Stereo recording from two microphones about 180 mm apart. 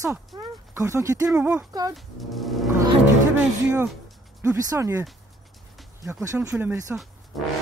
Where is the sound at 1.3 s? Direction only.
5° right (ahead or behind).